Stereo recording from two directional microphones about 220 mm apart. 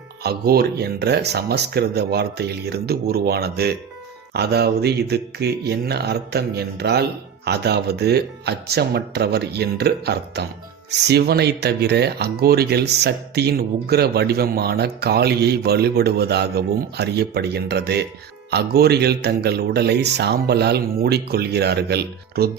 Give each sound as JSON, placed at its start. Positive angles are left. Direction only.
{"t": 0.2, "sound": "speech", "side_deg": -45}